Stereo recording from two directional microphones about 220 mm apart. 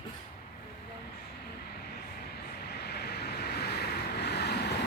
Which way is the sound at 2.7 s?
50° left (ahead or behind).